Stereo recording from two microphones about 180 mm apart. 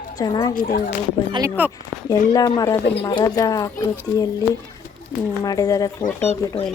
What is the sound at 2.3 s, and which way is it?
Speech, 20° left (ahead or behind).